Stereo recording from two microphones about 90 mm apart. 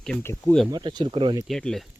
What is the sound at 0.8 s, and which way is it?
Speech, 65° right (ahead or behind).